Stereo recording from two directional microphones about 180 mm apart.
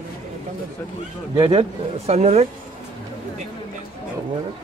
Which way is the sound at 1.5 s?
35° right (ahead or behind).